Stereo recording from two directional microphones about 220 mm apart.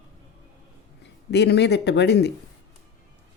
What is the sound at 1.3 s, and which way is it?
Speech, 50° left (ahead or behind).